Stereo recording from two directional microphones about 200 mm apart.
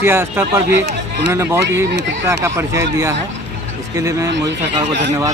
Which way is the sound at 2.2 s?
15° right (ahead or behind).